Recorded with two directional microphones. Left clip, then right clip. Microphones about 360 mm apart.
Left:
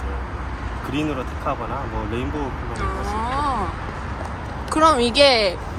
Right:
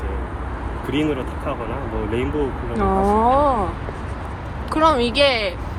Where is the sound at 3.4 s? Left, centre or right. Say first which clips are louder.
Right 5 dB; centre.